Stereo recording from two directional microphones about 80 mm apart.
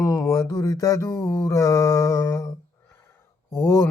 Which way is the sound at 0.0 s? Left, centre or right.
Left.